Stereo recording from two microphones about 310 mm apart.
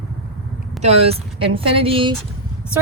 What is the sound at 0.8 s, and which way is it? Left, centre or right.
Speech, centre.